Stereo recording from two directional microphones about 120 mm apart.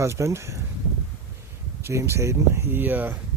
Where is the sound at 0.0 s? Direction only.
25° right (ahead or behind).